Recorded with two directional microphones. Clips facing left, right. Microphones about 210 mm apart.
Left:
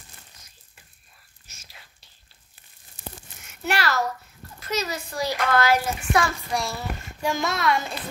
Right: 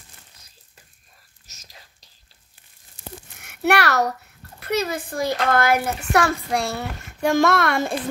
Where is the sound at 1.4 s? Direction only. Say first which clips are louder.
Right 2 dB; 40° right (ahead or behind).